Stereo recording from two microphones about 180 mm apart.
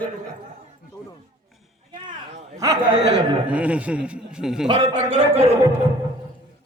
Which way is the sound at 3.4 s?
5° right (ahead or behind).